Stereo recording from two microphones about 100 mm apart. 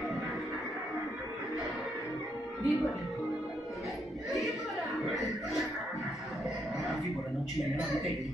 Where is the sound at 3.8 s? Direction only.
Centre (ahead or behind).